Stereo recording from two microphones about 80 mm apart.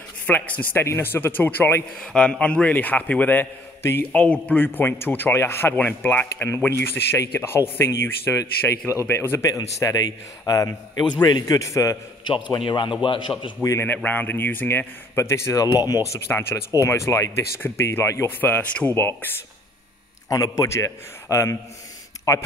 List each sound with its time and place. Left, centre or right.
0.3 s speech: left
2.1 s speech: centre; by 5.8 s left
5.8 s speech: left
9.5 s a man's voice: left
11.5 s speech: left
12.4 s a man's voice: left
13.6 s speech: left
14.0 s speech: left
15.5 s a man's voice: left
16.3 s speech: left
16.7 s speech: left
18.4 s speech: left
18.9 s speech: left
20.2 s speech: left